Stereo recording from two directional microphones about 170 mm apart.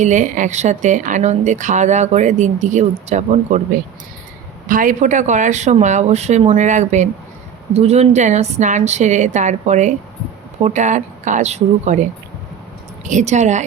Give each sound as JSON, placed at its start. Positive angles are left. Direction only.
{"t": 0.0, "sound": "a woman's voice", "side_deg": -45}
{"t": 4.7, "sound": "a woman's voice", "side_deg": -50}
{"t": 13.1, "sound": "a woman's voice", "side_deg": -45}